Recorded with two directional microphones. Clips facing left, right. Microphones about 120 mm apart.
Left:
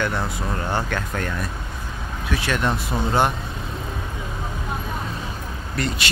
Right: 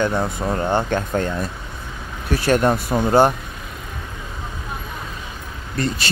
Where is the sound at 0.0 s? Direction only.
20° right (ahead or behind).